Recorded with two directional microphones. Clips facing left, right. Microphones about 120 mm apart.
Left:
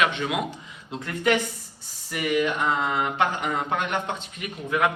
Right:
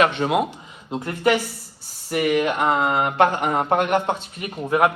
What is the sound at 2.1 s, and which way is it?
Speech, 55° right (ahead or behind).